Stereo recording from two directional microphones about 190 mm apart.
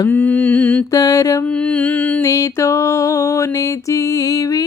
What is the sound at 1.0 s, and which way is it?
Speech, 20° left (ahead or behind).